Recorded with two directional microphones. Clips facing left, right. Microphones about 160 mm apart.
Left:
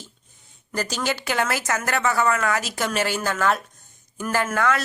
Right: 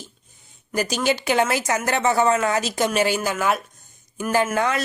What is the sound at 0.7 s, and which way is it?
Speech, 15° right (ahead or behind).